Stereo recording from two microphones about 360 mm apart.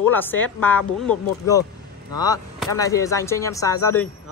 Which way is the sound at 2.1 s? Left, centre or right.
Centre.